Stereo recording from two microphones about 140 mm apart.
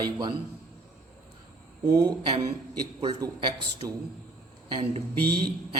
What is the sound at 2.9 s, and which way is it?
Speech, 30° right (ahead or behind).